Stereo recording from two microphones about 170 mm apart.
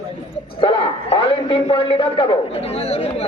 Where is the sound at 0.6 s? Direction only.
30° left (ahead or behind).